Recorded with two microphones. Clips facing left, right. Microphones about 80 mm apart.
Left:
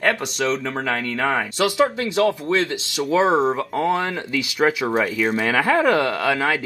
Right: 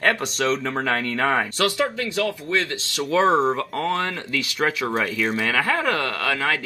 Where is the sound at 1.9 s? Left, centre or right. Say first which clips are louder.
Left 5 dB; left.